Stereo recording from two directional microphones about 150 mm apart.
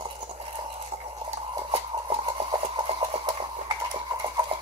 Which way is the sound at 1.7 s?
35° right (ahead or behind).